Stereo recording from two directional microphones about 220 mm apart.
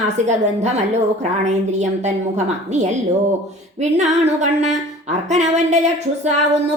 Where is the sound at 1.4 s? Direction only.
30° right (ahead or behind).